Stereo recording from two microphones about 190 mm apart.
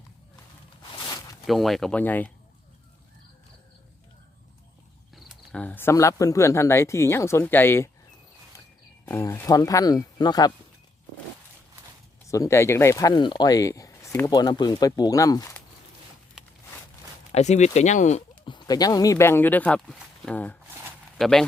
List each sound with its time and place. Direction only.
1.5 s speech: centre (ahead or behind)
5.1 s speech: centre (ahead or behind)
9.0 s speech: 15° left (ahead or behind)
12.3 s speech: 15° left (ahead or behind)
17.3 s speech: 35° left (ahead or behind)
18.4 s speech: 25° left (ahead or behind); by 21.4 s centre (ahead or behind)